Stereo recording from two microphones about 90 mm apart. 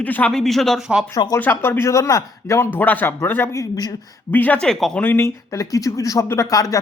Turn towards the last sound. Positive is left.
turn(degrees=40)  # may be behind; listen again after turning